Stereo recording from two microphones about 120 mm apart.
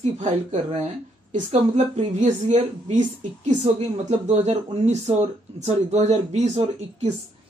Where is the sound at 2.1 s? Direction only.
85° right.